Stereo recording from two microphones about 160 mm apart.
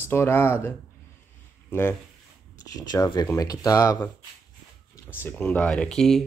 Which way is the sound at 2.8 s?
25° left (ahead or behind).